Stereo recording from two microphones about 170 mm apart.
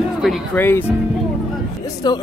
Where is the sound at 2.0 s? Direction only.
25° left (ahead or behind).